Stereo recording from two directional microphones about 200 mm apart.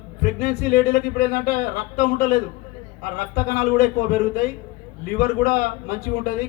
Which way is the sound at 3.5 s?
45° left (ahead or behind).